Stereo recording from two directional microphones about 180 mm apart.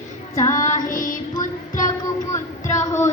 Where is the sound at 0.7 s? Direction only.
50° left (ahead or behind).